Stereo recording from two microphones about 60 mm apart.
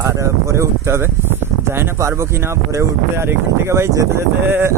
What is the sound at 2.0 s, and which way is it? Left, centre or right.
Speech, right.